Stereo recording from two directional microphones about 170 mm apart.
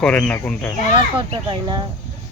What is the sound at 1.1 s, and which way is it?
Speech, 25° right (ahead or behind).